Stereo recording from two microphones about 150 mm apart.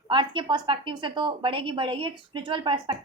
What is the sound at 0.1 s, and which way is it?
A woman's voice, 30° right (ahead or behind).